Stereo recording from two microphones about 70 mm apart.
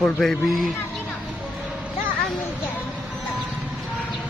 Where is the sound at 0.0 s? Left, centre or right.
Centre.